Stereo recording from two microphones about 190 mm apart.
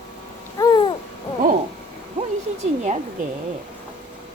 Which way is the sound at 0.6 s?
20° left (ahead or behind).